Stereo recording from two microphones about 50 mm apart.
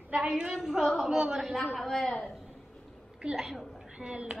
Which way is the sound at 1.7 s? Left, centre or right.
Centre.